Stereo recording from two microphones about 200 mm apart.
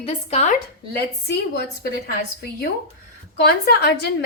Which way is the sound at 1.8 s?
50° left (ahead or behind).